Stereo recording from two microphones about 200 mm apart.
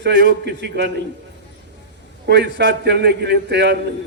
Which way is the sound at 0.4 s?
55° right (ahead or behind).